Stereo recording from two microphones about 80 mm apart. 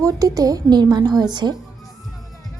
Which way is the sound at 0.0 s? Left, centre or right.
Right.